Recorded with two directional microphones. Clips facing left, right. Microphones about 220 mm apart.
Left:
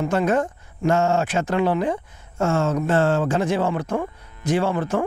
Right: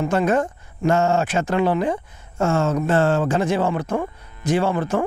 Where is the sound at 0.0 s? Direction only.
15° right (ahead or behind).